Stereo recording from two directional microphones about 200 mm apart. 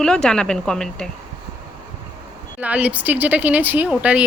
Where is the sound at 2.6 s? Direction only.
5° right (ahead or behind).